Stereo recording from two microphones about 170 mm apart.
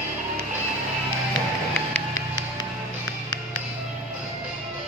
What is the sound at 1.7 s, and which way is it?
Music, 15° left (ahead or behind).